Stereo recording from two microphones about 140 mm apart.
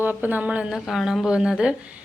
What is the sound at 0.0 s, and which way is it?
A woman's voice, 15° right (ahead or behind).